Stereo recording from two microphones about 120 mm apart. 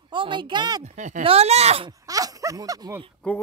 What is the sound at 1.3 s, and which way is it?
Speech, 60° right (ahead or behind).